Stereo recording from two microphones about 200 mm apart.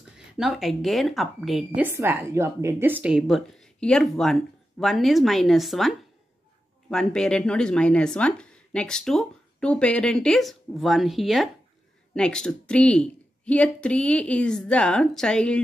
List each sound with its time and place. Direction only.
0.4 s speech: centre (ahead or behind)
1.8 s speech: 10° right (ahead or behind); by 15.6 s 5° left (ahead or behind)